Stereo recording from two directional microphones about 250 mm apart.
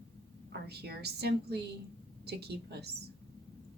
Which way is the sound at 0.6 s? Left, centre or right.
Right.